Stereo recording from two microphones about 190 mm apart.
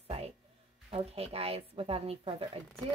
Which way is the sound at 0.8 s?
30° right (ahead or behind).